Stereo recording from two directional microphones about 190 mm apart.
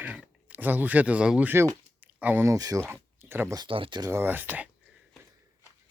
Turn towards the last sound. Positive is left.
turn(degrees=-10)  # may be behind; listen again after turning